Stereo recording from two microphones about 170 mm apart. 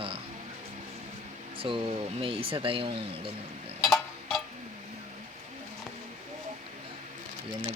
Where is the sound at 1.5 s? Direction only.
30° right (ahead or behind).